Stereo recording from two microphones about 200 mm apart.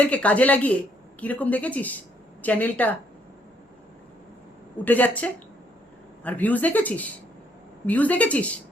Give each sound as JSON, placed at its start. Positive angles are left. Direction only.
{"t": 0.0, "sound": "a woman's voice", "side_deg": 5}
{"t": 4.9, "sound": "a woman's voice", "side_deg": 10}